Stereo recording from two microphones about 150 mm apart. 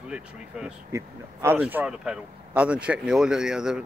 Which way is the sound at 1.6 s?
10° right (ahead or behind).